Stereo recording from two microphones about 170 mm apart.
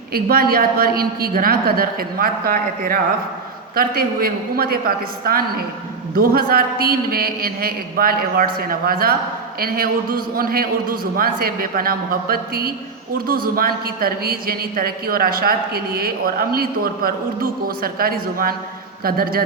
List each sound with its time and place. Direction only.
0.1 s a woman's voice: 60° right (ahead or behind)